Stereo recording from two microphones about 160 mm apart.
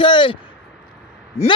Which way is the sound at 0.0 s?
30° left (ahead or behind).